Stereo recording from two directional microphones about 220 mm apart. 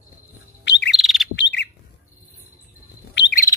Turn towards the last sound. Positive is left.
turn(degrees=50)  # may be behind; listen again after turning